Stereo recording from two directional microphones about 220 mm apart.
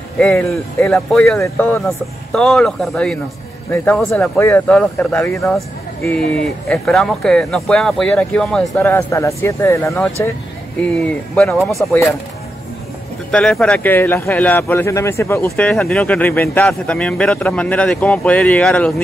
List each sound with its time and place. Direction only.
0.2 s speech: 5° left (ahead or behind)
11.3 s speech: centre (ahead or behind)
13.3 s speech: 5° left (ahead or behind)